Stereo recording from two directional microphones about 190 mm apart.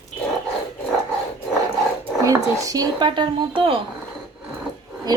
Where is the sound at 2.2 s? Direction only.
15° right (ahead or behind).